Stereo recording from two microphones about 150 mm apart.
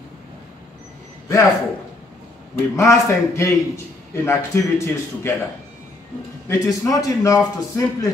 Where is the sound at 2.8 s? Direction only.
20° left (ahead or behind).